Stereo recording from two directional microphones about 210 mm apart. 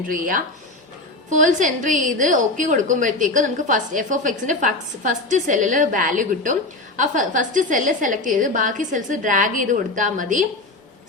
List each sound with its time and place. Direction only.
0.1 s a woman's voice: 40° right (ahead or behind)